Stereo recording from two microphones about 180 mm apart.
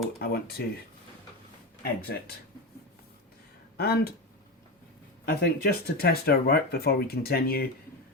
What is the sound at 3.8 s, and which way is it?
Speech, 60° left (ahead or behind).